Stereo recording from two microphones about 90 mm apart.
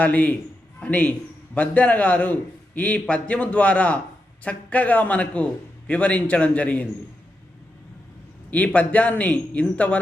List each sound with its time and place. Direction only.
0.0 s a man's voice: 15° left (ahead or behind)
8.4 s a man's voice: 15° left (ahead or behind)